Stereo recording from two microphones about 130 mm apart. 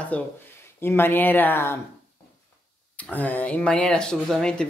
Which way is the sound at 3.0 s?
10° left (ahead or behind).